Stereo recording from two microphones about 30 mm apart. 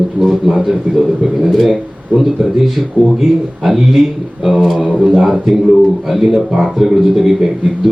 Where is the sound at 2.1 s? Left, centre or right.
Right.